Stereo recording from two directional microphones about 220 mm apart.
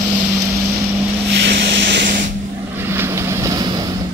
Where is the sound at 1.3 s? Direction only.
50° right (ahead or behind).